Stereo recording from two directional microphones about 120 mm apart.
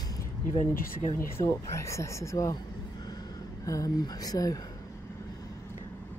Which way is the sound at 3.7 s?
30° left (ahead or behind).